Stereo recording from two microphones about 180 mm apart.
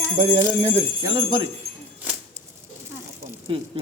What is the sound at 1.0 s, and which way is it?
Speech, 20° right (ahead or behind).